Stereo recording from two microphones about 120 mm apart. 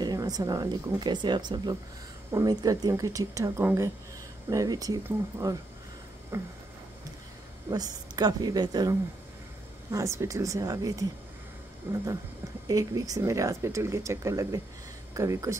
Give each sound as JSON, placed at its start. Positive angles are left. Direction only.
{"t": 0.0, "sound": "speech", "side_deg": -30}
{"t": 7.7, "sound": "speech", "side_deg": -35}
{"t": 11.9, "sound": "speech", "side_deg": -20}
{"t": 12.6, "sound": "speech", "side_deg": -30}